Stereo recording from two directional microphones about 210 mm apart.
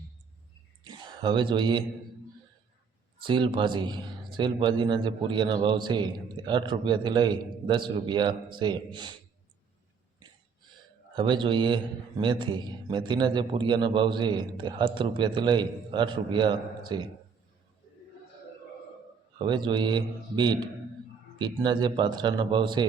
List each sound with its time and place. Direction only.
0.9 s speech: 20° right (ahead or behind)
3.2 s a man's voice: 25° right (ahead or behind)
11.1 s a man's voice: 20° right (ahead or behind)
19.5 s a man's voice: 20° right (ahead or behind)